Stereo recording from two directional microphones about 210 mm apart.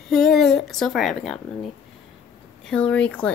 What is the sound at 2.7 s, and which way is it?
Speech, 5° left (ahead or behind).